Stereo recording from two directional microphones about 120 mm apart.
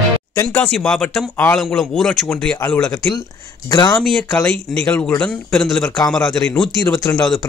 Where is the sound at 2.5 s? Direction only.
20° left (ahead or behind).